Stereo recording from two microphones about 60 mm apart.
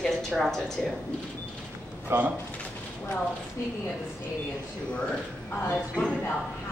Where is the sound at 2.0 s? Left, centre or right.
Right.